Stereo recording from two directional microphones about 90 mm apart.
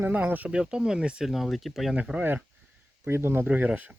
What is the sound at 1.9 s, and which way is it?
Speech, 15° right (ahead or behind).